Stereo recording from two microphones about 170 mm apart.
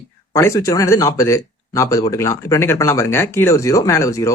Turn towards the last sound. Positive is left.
turn(degrees=20)  # may be behind; listen again after turning